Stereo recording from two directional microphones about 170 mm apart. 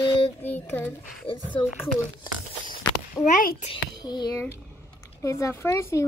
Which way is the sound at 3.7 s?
25° left (ahead or behind).